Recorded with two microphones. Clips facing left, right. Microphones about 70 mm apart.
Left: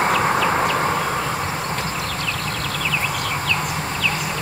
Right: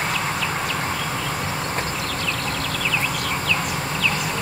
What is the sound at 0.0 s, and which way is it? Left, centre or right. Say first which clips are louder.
Vehicle: left 7 dB; left.